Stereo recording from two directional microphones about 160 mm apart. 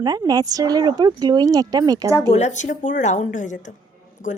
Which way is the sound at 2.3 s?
45° left (ahead or behind).